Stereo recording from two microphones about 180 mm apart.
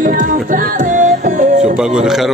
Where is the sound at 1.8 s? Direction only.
5° right (ahead or behind).